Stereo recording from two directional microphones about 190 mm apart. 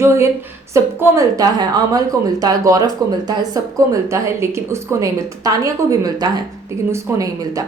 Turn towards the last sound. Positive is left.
turn(degrees=-20)  # may be behind; listen again after turning